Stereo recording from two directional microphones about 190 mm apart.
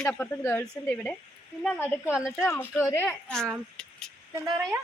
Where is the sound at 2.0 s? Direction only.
5° right (ahead or behind).